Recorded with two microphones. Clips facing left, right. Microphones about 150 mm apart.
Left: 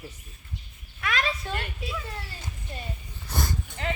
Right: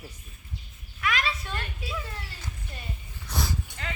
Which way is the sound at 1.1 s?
45° left (ahead or behind).